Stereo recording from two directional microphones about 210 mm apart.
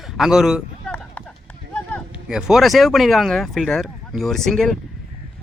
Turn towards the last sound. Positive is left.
turn(degrees=0)  # may be behind; listen again after turning